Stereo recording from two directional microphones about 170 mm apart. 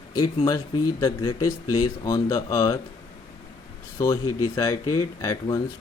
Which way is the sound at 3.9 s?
20° left (ahead or behind).